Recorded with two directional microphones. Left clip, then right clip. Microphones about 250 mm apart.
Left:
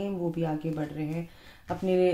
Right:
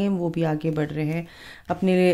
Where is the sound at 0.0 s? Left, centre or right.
Right.